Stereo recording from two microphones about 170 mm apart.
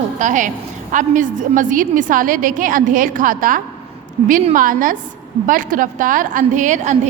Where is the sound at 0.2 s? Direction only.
50° right (ahead or behind).